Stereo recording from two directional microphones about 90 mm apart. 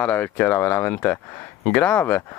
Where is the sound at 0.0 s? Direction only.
20° left (ahead or behind).